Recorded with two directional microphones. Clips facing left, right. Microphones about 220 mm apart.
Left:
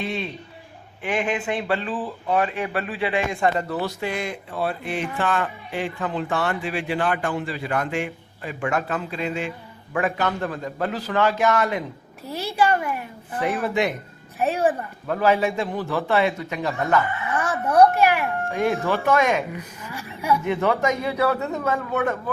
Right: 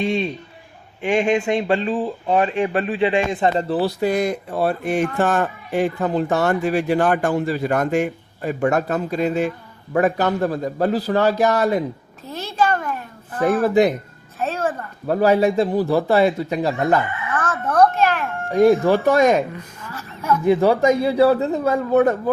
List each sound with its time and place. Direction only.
0.0 s a man's voice: 25° right (ahead or behind)
12.2 s a child's voice: 10° left (ahead or behind)
13.6 s a man's voice: 35° right (ahead or behind)
14.3 s a child's voice: 15° left (ahead or behind)
15.0 s a man's voice: 35° right (ahead or behind)
17.3 s a child's voice: 15° left (ahead or behind)
18.5 s a man's voice: 40° right (ahead or behind)
19.8 s a woman's voice: 15° left (ahead or behind)
20.4 s a man's voice: 35° right (ahead or behind)